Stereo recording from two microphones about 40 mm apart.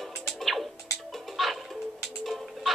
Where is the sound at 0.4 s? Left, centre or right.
Centre.